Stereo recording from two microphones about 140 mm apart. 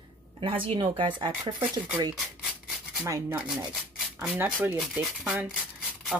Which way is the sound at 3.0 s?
20° right (ahead or behind).